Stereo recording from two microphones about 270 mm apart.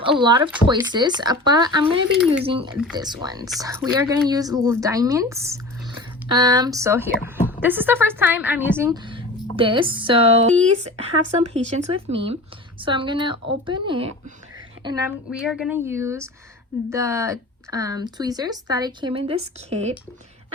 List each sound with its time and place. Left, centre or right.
0.0 s speech: centre
2.1 s speech: centre
2.4 s speech: centre